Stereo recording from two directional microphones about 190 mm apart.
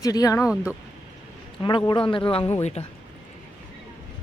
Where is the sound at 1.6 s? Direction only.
25° left (ahead or behind).